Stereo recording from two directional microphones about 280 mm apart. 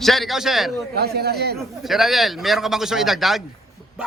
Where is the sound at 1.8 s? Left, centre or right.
Centre.